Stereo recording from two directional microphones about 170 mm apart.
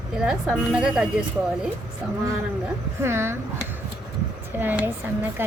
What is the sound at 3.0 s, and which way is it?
Speech, 15° right (ahead or behind).